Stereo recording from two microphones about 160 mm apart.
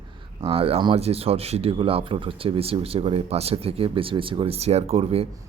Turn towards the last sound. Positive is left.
turn(degrees=-40)  # may be behind; listen again after turning